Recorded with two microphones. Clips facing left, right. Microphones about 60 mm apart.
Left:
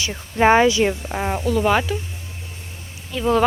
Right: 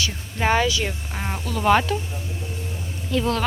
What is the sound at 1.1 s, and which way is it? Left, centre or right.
Speech, centre.